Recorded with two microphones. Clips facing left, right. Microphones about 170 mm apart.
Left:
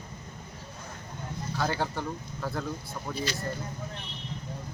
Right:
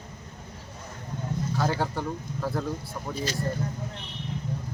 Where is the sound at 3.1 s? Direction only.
45° right (ahead or behind).